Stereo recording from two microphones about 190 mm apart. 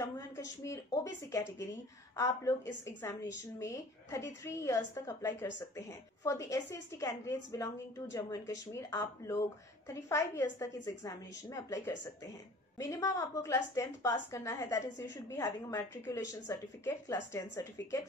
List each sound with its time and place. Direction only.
0.0 s a woman's voice: 15° left (ahead or behind)